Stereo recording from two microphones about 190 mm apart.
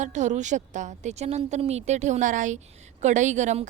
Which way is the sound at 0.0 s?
40° right (ahead or behind).